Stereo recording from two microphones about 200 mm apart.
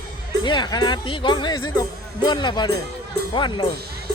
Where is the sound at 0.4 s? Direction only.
20° left (ahead or behind).